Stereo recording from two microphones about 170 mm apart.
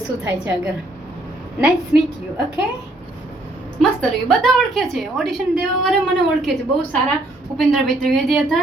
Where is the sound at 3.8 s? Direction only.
5° left (ahead or behind).